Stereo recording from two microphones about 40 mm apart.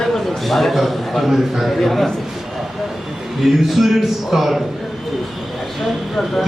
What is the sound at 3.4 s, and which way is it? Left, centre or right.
A man's voice, centre.